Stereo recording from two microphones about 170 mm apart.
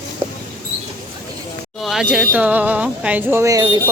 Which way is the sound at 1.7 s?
Centre (ahead or behind).